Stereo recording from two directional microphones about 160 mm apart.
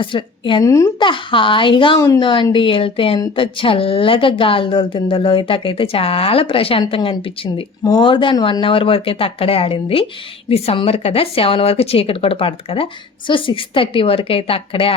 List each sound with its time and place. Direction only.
0.0 s speech: 30° left (ahead or behind)
0.6 s speech: 20° left (ahead or behind)
0.9 s speech: 30° left (ahead or behind)